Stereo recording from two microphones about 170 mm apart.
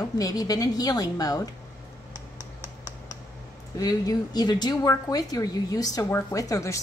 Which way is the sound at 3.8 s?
20° left (ahead or behind).